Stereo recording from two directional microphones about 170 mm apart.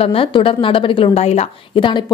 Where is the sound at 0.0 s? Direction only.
35° left (ahead or behind).